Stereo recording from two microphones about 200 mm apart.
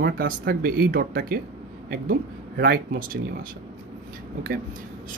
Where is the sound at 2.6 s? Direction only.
50° right (ahead or behind).